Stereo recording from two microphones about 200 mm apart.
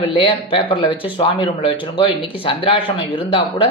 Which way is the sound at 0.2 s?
25° left (ahead or behind).